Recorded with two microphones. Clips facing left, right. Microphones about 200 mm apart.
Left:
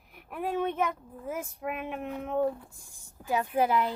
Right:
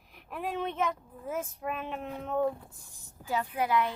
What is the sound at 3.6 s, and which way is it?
Speech, 25° left (ahead or behind).